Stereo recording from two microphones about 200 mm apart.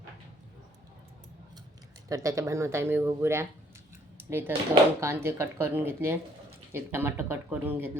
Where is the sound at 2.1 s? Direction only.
15° right (ahead or behind).